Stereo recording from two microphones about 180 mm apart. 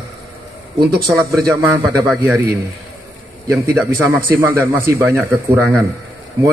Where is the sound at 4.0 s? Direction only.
15° right (ahead or behind).